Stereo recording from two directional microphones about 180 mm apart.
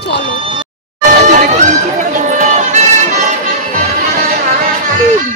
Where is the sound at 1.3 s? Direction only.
45° right (ahead or behind).